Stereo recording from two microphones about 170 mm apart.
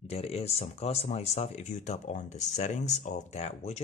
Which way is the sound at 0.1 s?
35° left (ahead or behind).